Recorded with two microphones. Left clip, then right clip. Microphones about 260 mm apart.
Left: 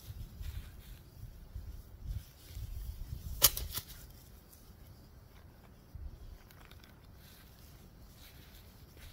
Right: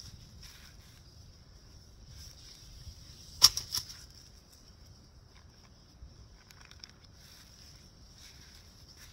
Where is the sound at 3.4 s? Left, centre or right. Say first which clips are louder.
Right 8 dB; centre.